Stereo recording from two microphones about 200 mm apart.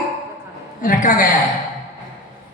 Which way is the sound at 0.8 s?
40° left (ahead or behind).